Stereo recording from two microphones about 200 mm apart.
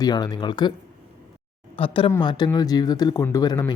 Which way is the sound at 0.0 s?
20° left (ahead or behind).